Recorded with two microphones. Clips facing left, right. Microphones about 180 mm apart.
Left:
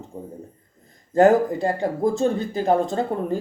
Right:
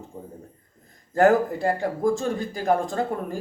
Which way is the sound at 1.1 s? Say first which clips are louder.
Left 3 dB; 20° left (ahead or behind).